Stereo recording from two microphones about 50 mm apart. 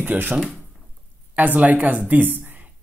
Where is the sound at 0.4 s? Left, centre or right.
Centre.